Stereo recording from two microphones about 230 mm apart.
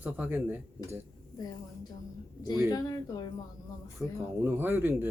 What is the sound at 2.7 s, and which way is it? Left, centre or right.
Speech, centre.